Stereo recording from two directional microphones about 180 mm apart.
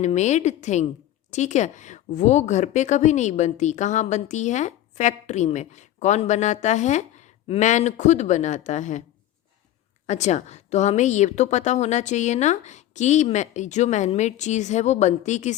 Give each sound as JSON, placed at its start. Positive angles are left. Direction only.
{"t": 0.0, "sound": "a woman's voice", "side_deg": 40}
{"t": 10.1, "sound": "a woman's voice", "side_deg": 40}